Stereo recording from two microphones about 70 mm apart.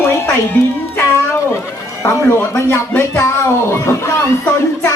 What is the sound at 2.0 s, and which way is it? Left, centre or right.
Speech, left.